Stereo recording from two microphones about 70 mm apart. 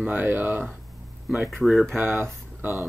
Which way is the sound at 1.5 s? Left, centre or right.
Centre.